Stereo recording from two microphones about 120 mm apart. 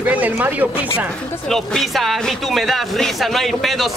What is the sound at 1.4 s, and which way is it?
Speech, 5° left (ahead or behind).